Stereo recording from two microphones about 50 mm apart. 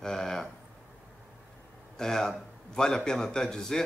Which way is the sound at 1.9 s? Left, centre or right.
Centre.